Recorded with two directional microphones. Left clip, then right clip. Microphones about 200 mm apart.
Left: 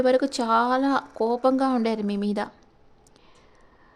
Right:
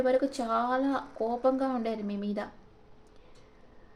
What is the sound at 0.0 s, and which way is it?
Speech, 50° left (ahead or behind).